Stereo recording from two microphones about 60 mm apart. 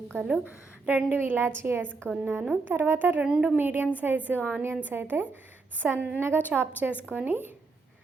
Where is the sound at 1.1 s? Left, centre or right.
Right.